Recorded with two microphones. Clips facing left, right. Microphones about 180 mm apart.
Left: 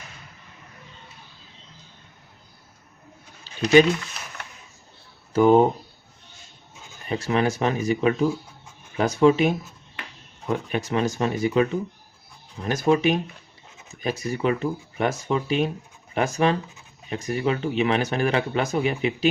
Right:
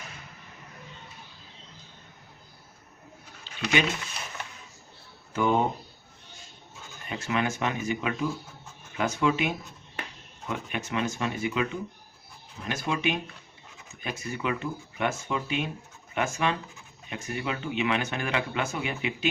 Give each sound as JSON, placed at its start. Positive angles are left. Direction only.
{"t": 3.4, "sound": "a sound", "side_deg": 35}
{"t": 5.3, "sound": "speech", "side_deg": 40}
{"t": 7.1, "sound": "speech", "side_deg": 35}
{"t": 10.5, "sound": "speech", "side_deg": 35}